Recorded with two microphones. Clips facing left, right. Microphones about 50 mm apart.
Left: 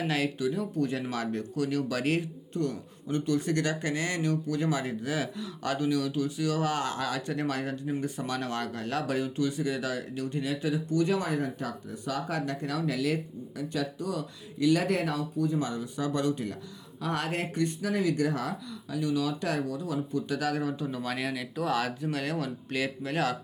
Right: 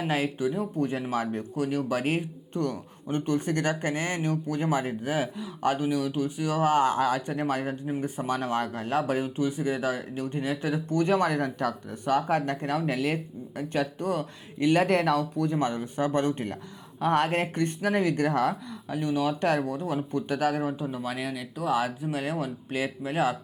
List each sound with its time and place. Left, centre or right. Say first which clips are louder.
0.0 s speech: right 2 dB; right
2.5 s speech: right 3 dB; right; by 23.4 s centre